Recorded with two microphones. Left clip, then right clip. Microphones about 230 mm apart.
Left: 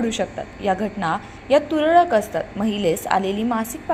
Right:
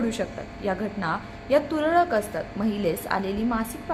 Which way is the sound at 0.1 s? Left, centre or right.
Centre.